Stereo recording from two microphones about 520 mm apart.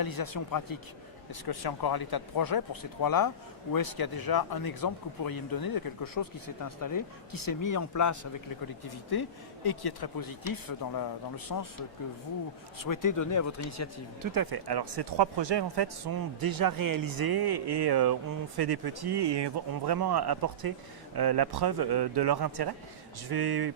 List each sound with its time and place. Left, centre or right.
0.0 s speech: left
12.8 s speech: left
14.2 s speech: right